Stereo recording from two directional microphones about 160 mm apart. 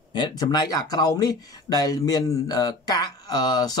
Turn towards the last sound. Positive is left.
turn(degrees=25)  # may be behind; listen again after turning